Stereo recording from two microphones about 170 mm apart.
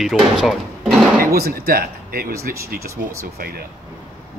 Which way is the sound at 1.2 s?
60° right (ahead or behind).